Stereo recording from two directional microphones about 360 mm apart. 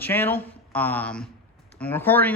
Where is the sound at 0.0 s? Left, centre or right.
Centre.